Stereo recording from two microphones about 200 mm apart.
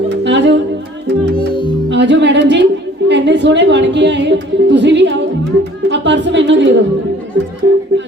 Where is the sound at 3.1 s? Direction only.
60° right (ahead or behind).